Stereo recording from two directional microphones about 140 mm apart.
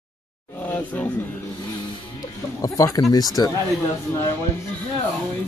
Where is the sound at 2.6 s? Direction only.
25° left (ahead or behind).